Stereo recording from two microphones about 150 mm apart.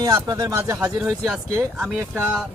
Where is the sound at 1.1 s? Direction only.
Centre (ahead or behind).